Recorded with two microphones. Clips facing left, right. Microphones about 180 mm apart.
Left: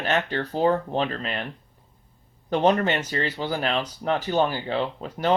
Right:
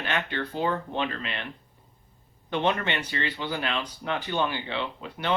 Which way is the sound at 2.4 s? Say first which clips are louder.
Left 6 dB; 40° left (ahead or behind).